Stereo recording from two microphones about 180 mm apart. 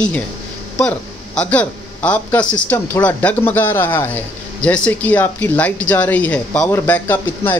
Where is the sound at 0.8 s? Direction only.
5° left (ahead or behind).